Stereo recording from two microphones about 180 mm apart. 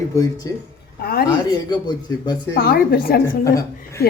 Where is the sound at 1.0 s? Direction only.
60° left (ahead or behind).